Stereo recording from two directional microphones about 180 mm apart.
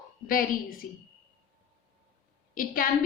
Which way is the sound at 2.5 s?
50° left (ahead or behind).